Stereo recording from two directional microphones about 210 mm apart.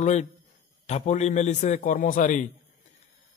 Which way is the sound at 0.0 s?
35° left (ahead or behind).